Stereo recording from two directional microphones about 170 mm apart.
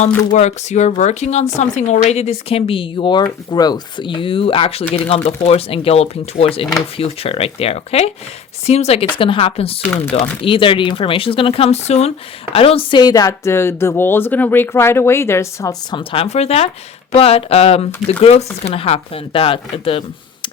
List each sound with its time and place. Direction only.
0.3 s speech: 40° left (ahead or behind)